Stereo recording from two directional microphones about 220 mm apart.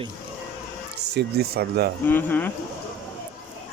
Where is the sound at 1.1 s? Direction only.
50° right (ahead or behind).